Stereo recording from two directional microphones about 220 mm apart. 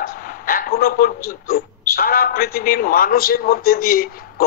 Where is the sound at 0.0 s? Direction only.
40° left (ahead or behind).